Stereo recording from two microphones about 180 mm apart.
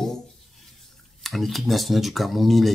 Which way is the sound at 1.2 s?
Centre (ahead or behind).